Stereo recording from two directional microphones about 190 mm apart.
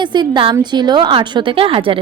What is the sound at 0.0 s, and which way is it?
A woman's voice, 25° right (ahead or behind).